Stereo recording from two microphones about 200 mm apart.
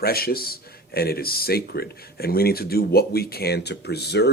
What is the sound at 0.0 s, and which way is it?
Speech, 50° left (ahead or behind).